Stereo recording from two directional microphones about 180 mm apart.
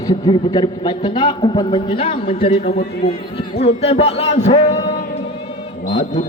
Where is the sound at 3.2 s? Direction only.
30° left (ahead or behind).